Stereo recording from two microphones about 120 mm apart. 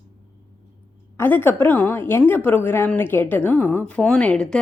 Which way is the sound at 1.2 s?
20° left (ahead or behind).